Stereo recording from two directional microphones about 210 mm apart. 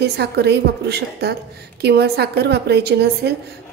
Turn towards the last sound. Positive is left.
turn(degrees=-50)  # may be behind; listen again after turning